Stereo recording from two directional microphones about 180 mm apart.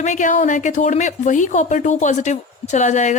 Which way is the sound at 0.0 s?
45° left (ahead or behind).